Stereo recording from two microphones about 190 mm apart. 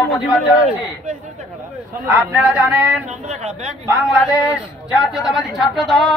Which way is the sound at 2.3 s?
5° right (ahead or behind).